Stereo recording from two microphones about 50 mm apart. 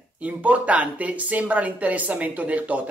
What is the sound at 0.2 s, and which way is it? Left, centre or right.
Speech, right.